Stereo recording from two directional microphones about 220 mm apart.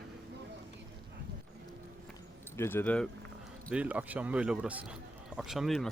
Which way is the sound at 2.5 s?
10° left (ahead or behind).